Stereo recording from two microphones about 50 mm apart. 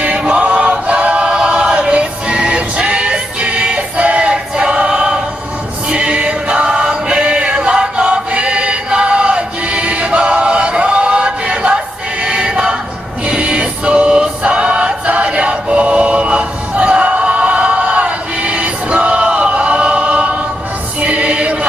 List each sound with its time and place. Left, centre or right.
0.0 s choir: right
13.2 s music: right
21.0 s choir: right